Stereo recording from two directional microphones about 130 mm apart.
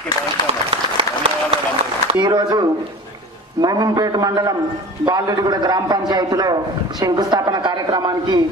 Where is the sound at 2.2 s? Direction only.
35° right (ahead or behind).